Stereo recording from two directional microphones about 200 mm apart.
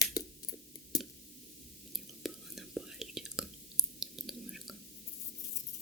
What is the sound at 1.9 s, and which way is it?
Whispering, centre (ahead or behind).